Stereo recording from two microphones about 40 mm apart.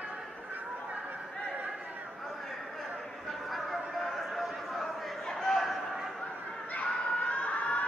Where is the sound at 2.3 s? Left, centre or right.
Centre.